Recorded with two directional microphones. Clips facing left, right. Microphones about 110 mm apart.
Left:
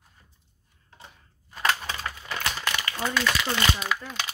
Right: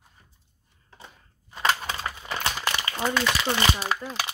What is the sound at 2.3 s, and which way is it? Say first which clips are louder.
Crumpling: right 2 dB; 25° right (ahead or behind).